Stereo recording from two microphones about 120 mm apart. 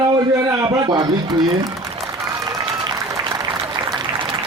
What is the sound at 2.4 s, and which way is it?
Applause, 35° right (ahead or behind).